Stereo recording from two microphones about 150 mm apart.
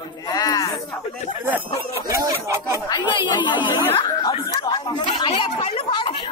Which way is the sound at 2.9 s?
30° left (ahead or behind).